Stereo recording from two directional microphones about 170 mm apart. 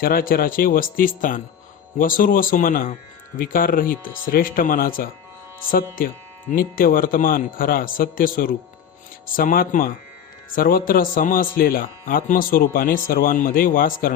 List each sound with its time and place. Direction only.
0.0 s speech: 60° left (ahead or behind)
6.5 s speech: 55° left (ahead or behind)